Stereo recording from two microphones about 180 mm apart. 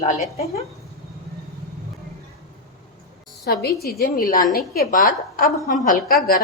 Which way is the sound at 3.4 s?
60° left (ahead or behind).